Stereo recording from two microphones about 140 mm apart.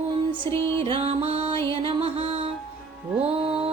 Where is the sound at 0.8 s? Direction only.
40° right (ahead or behind).